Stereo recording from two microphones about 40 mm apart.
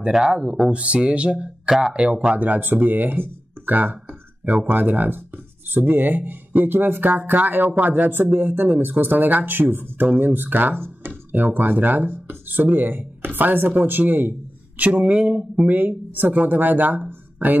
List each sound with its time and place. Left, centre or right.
0.1 s speech: centre
1.7 s speech: centre
2.0 s speech: right
11.3 s speech: right
12.1 s speech: right
12.5 s speech: right
14.8 s speech: right
15.6 s speech: right